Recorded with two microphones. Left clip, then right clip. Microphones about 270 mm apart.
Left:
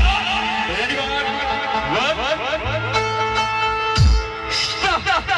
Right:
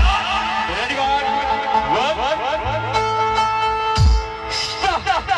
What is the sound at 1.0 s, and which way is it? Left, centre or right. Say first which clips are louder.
Music: right 3 dB; right.